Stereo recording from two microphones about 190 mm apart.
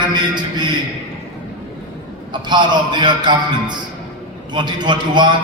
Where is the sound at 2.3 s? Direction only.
25° right (ahead or behind).